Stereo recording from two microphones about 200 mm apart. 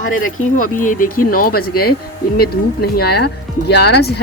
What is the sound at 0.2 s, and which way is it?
Speech, 40° left (ahead or behind).